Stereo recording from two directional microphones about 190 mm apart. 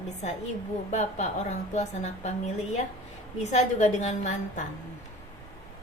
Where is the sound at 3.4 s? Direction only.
35° left (ahead or behind).